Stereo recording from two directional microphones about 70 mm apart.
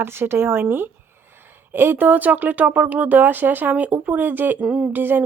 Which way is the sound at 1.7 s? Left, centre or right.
Right.